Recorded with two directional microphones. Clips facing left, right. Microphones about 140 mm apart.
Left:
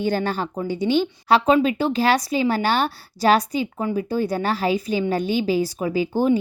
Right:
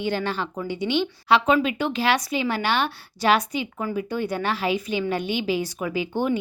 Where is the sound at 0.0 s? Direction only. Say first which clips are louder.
Left 3 dB; 40° left (ahead or behind).